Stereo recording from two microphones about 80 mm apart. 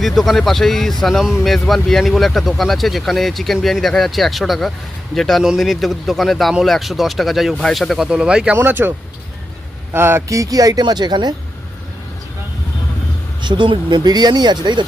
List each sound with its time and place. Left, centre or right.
0.0 s speech: centre
1.2 s speech: centre
8.5 s speech: right
9.9 s speech: right
13.4 s speech: right